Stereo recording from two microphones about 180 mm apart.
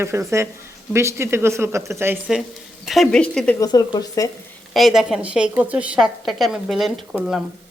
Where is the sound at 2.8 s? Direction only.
Centre (ahead or behind).